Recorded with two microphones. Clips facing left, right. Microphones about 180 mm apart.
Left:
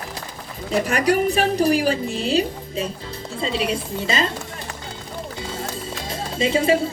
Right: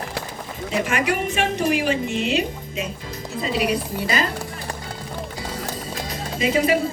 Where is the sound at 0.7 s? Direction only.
35° left (ahead or behind).